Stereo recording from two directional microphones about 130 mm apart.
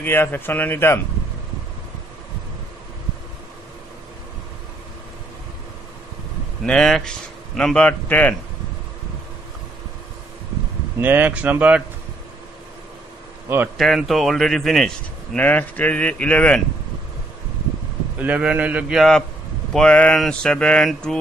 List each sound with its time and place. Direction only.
0.0 s a man's voice: 15° left (ahead or behind)
6.6 s a man's voice: 5° left (ahead or behind)
11.0 s a man's voice: 15° right (ahead or behind)
13.7 s speech: centre (ahead or behind)
15.3 s a man's voice: 10° left (ahead or behind)
18.2 s a man's voice: 10° right (ahead or behind); by 21.2 s 5° left (ahead or behind)